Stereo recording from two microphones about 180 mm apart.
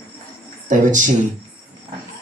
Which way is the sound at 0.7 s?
45° right (ahead or behind).